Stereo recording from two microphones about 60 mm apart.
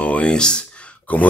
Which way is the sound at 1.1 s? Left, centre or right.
Left.